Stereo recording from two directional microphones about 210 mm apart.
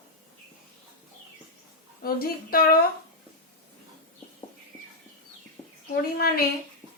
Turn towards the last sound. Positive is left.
turn(degrees=45)  # may be behind; listen again after turning